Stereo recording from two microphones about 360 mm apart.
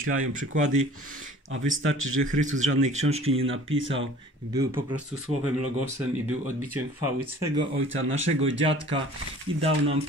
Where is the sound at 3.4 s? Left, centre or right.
Right.